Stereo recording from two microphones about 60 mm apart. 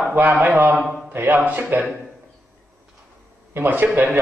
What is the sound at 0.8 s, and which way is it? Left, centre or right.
Speech, centre.